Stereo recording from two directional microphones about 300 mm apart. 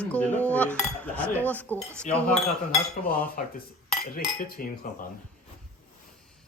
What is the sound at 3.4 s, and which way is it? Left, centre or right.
Cutlery, left.